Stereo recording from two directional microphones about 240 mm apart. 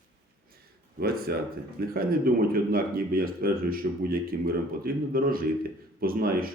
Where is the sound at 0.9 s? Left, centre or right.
Right.